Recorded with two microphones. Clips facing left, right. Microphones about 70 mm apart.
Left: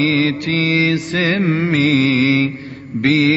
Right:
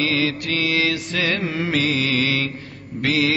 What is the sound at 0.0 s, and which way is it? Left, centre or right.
Mantra, left.